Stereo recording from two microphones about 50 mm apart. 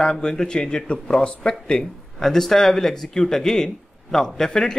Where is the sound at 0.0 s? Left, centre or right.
Centre.